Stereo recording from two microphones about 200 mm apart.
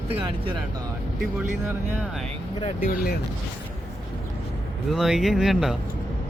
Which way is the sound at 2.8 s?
45° left (ahead or behind).